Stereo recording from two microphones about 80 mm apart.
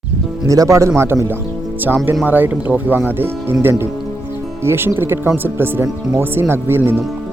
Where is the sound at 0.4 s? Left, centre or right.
Right.